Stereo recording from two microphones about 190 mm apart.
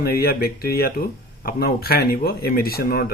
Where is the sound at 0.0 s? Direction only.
55° left (ahead or behind).